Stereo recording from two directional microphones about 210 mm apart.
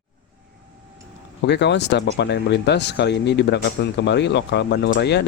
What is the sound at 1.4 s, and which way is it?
Speech, 55° left (ahead or behind).